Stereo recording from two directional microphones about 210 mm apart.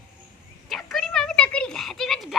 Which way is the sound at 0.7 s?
Centre (ahead or behind).